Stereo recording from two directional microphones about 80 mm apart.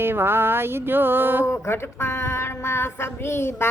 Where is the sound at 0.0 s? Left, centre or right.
Right.